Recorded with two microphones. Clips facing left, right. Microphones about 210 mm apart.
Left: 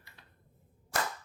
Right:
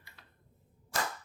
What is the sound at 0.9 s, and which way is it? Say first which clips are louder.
Cap gun: left 1 dB; 60° left (ahead or behind).